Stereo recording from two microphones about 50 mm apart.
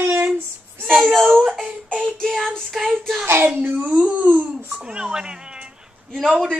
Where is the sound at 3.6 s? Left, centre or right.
Right.